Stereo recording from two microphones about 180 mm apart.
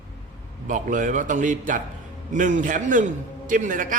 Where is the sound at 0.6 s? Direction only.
45° right (ahead or behind).